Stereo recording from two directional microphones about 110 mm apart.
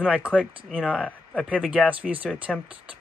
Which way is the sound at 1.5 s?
10° right (ahead or behind).